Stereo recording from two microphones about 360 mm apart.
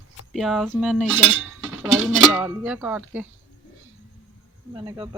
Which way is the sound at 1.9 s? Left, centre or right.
Centre.